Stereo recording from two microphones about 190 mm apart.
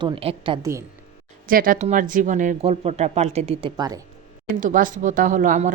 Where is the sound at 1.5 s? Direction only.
50° right (ahead or behind); by 3.7 s 35° right (ahead or behind).